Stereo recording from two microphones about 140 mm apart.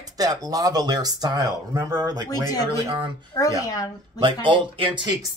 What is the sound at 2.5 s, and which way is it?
Speech, 25° left (ahead or behind).